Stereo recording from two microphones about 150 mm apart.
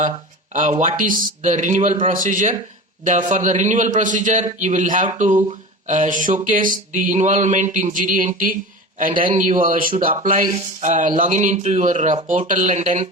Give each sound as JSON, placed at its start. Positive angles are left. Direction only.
{"t": 0.5, "sound": "a man's voice", "side_deg": -60}
{"t": 10.5, "sound": "speech", "side_deg": -55}